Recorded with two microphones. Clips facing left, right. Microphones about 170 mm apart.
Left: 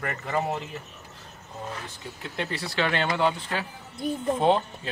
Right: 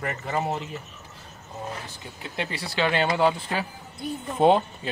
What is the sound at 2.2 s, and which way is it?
Speech, centre (ahead or behind).